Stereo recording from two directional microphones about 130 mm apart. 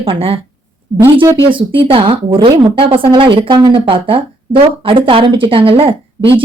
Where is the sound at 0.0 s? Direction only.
45° right (ahead or behind).